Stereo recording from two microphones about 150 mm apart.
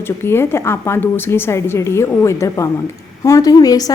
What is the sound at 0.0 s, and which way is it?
A woman's voice, 15° left (ahead or behind).